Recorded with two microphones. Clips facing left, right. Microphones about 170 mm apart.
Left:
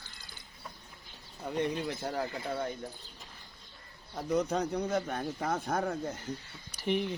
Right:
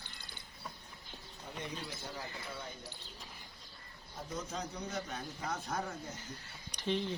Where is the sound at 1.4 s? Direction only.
65° left (ahead or behind).